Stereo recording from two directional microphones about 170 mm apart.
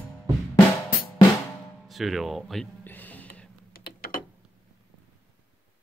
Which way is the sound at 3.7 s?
60° left (ahead or behind).